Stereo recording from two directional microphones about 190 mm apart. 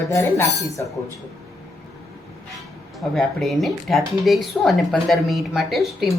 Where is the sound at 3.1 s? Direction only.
Centre (ahead or behind).